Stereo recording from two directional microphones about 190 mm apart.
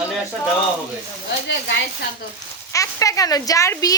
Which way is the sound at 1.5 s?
65° left (ahead or behind).